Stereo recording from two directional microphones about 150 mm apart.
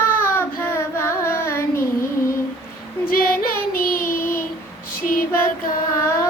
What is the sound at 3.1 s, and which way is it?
Female singing, 75° left (ahead or behind).